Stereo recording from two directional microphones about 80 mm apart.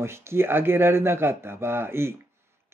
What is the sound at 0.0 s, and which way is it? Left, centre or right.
Speech, right.